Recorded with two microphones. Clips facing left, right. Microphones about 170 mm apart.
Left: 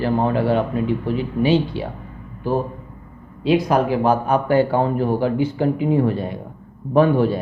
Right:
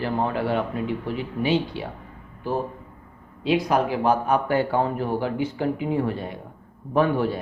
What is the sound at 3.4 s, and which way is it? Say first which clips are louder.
Speech: left 4 dB; 40° left (ahead or behind).